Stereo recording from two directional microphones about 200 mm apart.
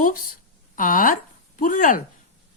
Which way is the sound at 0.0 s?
45° left (ahead or behind).